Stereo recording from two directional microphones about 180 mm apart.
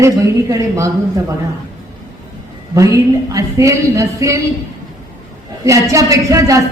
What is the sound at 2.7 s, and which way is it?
A woman's voice, 15° right (ahead or behind).